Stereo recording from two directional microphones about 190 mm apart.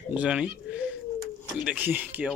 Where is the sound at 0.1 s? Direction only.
5° right (ahead or behind).